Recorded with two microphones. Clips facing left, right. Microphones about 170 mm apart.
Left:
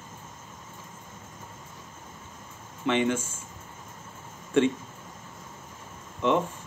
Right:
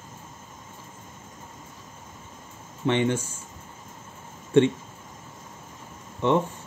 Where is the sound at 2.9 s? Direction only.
30° right (ahead or behind).